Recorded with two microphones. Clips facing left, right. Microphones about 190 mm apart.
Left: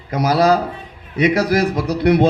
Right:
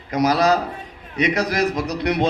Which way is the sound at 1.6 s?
30° left (ahead or behind).